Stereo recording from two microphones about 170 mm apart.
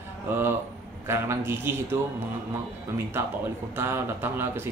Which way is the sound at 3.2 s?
15° right (ahead or behind).